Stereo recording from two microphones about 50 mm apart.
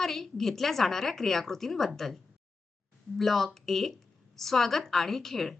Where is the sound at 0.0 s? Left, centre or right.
Centre.